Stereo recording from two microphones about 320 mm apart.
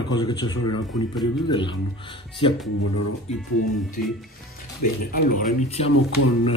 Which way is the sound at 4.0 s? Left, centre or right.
Left.